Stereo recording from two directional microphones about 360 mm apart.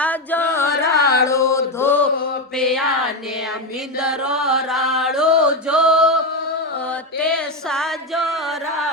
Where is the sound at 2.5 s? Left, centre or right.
Centre.